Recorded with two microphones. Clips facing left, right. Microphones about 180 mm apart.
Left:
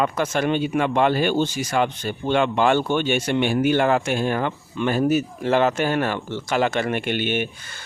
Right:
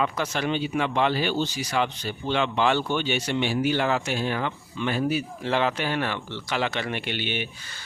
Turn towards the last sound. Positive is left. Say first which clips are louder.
# left 7 dB
turn(degrees=50)  # may be behind; listen again after turning